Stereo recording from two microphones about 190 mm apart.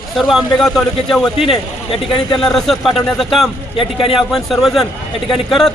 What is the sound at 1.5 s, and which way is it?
Speech, 30° left (ahead or behind).